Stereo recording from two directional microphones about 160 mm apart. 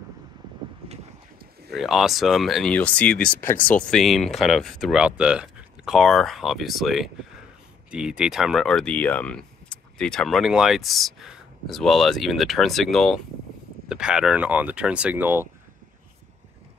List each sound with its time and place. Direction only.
1.7 s speech: centre (ahead or behind)
3.2 s speech: 70° left (ahead or behind)
3.4 s speech: 10° left (ahead or behind); by 15.4 s 10° right (ahead or behind)